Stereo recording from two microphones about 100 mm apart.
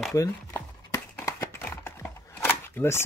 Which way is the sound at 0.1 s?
30° left (ahead or behind).